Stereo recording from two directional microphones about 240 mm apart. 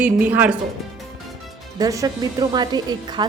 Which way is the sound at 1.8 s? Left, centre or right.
Centre.